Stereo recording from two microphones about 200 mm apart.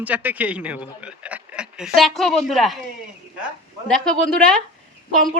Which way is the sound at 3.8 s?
5° left (ahead or behind).